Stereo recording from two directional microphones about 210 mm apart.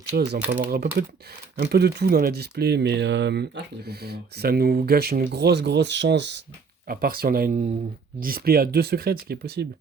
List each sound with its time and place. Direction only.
0.1 s speech: 45° right (ahead or behind)
6.8 s speech: 45° right (ahead or behind)